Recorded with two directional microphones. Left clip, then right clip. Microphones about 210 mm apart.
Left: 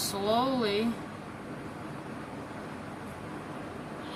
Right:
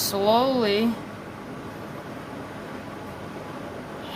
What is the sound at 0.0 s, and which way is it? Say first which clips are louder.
Speech: right 8 dB; 55° right (ahead or behind).